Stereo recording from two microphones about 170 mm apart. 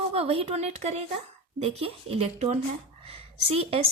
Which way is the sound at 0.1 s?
35° right (ahead or behind).